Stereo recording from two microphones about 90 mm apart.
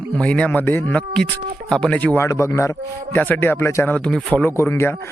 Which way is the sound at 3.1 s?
20° left (ahead or behind).